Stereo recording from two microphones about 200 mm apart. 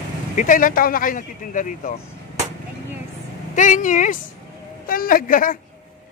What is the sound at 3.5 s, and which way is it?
A man's voice, 40° left (ahead or behind).